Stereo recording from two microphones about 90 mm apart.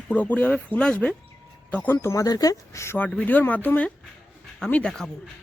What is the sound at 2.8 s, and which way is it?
Speech, 30° left (ahead or behind).